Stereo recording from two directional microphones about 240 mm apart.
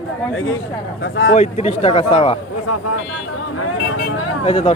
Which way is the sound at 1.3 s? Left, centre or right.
Left.